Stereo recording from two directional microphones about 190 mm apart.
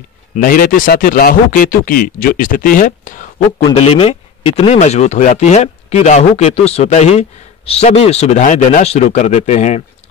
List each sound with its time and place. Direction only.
0.4 s speech: 50° left (ahead or behind)
3.6 s speech: 30° left (ahead or behind)